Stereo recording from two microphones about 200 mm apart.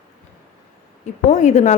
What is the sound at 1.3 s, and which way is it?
Speech, 35° left (ahead or behind).